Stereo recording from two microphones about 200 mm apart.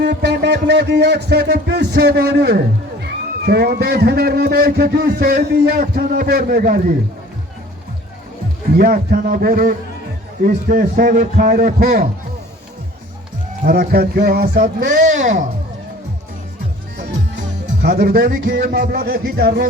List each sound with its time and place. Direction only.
0.0 s a man's voice: 55° right (ahead or behind)
8.8 s a man's voice: 45° right (ahead or behind)
13.7 s a man's voice: 50° right (ahead or behind)
17.8 s a man's voice: 50° right (ahead or behind)